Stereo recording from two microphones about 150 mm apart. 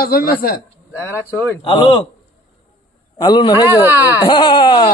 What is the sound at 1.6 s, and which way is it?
Speech, 35° left (ahead or behind).